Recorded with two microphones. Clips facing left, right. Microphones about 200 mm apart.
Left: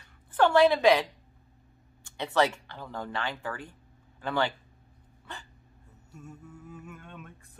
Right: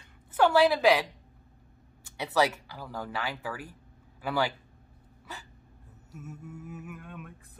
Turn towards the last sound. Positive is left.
turn(degrees=-5)  # may be behind; listen again after turning